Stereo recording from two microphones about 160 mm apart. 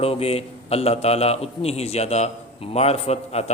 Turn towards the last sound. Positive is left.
turn(degrees=40)  # may be behind; listen again after turning